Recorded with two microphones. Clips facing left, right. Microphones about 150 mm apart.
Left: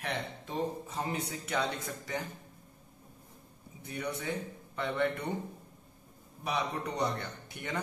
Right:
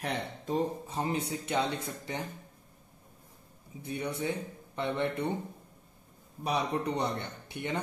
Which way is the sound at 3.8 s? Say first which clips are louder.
Right 3 dB; 30° right (ahead or behind).